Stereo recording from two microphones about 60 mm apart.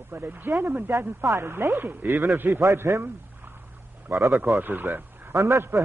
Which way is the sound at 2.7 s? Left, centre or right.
Right.